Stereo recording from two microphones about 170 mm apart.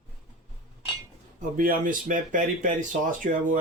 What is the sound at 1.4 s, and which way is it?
Speech, 55° right (ahead or behind).